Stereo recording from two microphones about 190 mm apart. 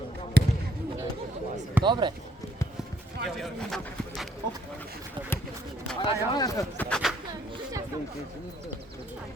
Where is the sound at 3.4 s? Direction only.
Centre (ahead or behind).